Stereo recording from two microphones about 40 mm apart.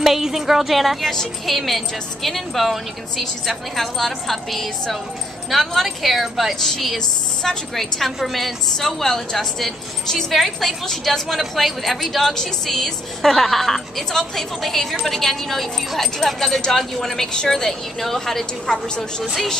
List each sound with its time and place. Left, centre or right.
0.0 s a woman's voice: centre